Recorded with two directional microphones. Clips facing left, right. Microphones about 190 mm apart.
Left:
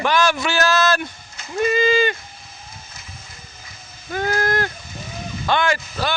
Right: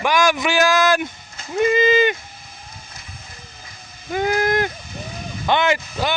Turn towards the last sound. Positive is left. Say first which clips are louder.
# right 2 dB
turn(degrees=-20)  # may be behind; listen again after turning